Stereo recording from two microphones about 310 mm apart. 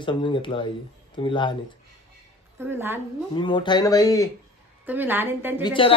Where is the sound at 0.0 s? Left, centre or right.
Centre.